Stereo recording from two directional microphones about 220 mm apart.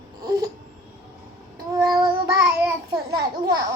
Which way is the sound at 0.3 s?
15° right (ahead or behind).